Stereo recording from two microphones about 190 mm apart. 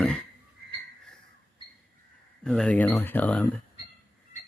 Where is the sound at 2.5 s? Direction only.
5° left (ahead or behind).